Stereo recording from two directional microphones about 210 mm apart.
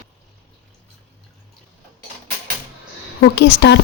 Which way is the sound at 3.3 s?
55° left (ahead or behind).